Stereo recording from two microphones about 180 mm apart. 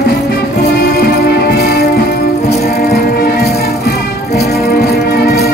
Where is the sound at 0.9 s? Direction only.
60° left (ahead or behind).